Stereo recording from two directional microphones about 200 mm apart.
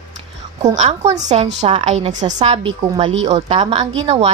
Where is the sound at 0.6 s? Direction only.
35° right (ahead or behind).